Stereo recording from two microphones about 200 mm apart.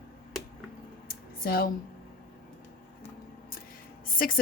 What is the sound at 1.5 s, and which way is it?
Speech, 50° left (ahead or behind).